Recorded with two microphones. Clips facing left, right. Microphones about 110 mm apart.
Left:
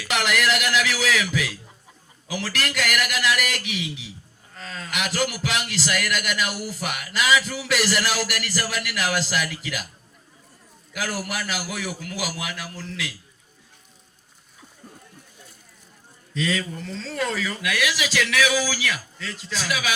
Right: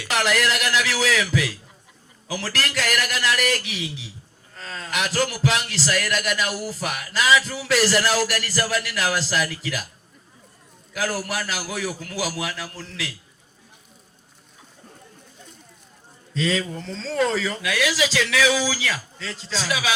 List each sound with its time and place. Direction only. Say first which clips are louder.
0.0 s a man's voice: right 1 dB; 35° right (ahead or behind)
10.9 s a man's voice: right 3 dB; 35° right (ahead or behind)
16.3 s speech: right 2 dB; 30° right (ahead or behind)